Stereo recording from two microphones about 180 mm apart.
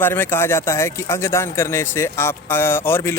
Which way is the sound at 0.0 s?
10° left (ahead or behind).